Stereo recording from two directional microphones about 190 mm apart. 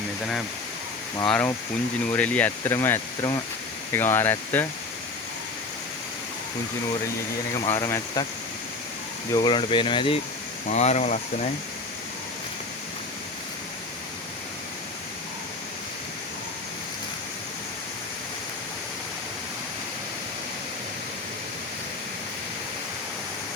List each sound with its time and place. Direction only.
1.3 s speech: 10° left (ahead or behind)
7.6 s speech: 25° left (ahead or behind)
9.3 s speech: 25° left (ahead or behind); by 11.5 s 40° left (ahead or behind)